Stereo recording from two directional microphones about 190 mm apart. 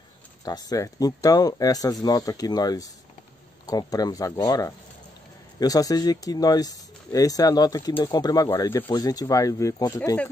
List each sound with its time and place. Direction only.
0.5 s speech: 20° left (ahead or behind)